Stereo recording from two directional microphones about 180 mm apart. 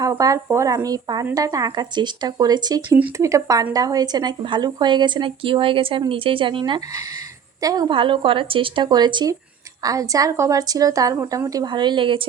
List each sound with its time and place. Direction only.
0.0 s speech: 20° right (ahead or behind)